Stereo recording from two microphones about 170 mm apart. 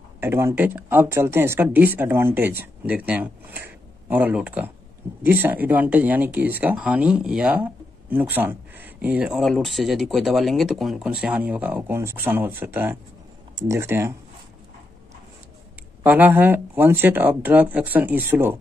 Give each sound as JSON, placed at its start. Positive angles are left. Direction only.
{"t": 0.2, "sound": "speech", "side_deg": -15}
{"t": 16.0, "sound": "speech", "side_deg": -10}